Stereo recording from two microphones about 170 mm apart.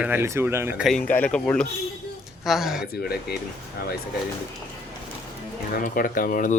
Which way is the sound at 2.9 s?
65° left (ahead or behind).